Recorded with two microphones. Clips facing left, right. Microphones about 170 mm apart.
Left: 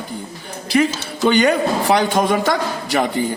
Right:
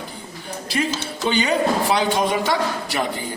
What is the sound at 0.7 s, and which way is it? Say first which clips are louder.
Speech: left 7 dB; 70° left (ahead or behind).